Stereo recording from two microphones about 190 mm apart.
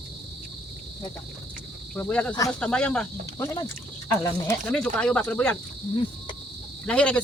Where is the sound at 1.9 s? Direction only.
10° left (ahead or behind).